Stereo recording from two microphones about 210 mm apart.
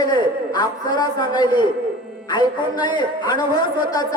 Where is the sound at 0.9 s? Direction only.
20° left (ahead or behind).